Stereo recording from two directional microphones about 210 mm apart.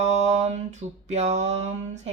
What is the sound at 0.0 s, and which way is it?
Mantra, 30° right (ahead or behind).